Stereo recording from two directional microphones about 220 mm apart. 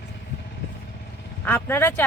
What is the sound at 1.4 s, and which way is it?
Speech, 10° left (ahead or behind).